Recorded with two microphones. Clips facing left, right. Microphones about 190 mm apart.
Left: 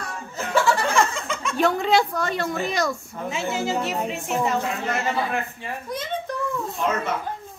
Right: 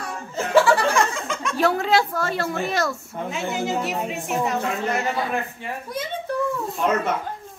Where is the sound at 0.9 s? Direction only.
Centre (ahead or behind).